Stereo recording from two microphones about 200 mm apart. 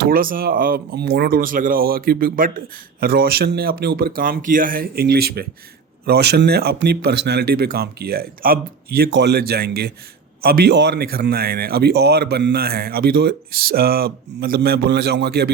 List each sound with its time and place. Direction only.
0.0 s speech: 45° right (ahead or behind)